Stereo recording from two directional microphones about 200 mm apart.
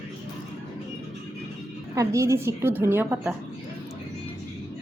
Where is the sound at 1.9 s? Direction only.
15° right (ahead or behind).